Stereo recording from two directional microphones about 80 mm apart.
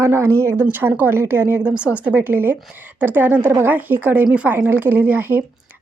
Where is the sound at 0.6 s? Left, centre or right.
Right.